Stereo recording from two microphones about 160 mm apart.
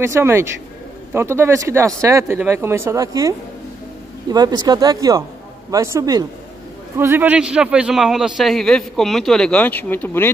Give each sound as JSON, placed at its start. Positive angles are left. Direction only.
{"t": 0.0, "sound": "a man's voice", "side_deg": -15}